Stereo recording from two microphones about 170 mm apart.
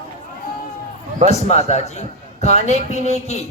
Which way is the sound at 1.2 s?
40° left (ahead or behind).